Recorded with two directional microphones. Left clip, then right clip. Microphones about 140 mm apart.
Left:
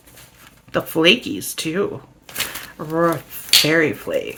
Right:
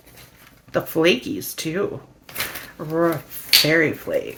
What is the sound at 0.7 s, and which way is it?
Speech, 20° left (ahead or behind).